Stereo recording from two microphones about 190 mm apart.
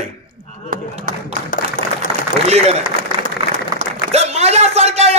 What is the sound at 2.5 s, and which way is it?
Speech, 35° right (ahead or behind).